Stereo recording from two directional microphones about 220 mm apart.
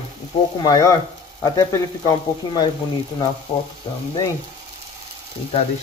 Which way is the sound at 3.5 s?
25° left (ahead or behind).